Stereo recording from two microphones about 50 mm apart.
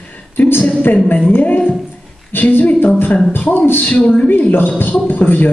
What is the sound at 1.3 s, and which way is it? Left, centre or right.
Speech, left.